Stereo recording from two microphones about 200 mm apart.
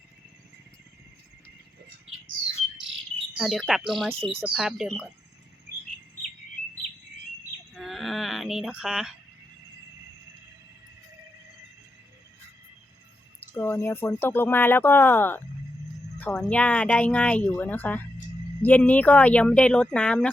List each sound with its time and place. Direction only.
3.3 s speech: centre (ahead or behind)
4.1 s speech: 30° right (ahead or behind)
4.4 s speech: 5° right (ahead or behind)
7.7 s a sound: centre (ahead or behind)
13.6 s speech: 15° left (ahead or behind)